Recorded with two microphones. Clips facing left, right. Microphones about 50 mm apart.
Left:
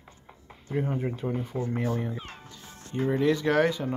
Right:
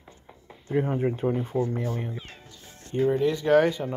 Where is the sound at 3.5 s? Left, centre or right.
Right.